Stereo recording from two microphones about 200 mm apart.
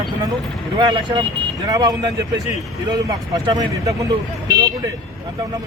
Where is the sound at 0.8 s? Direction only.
20° right (ahead or behind).